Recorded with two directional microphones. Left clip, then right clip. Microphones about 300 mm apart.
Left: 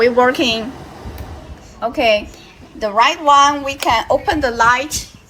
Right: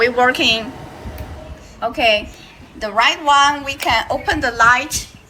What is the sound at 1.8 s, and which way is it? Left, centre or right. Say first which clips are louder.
A woman's voice: left 1 dB; left.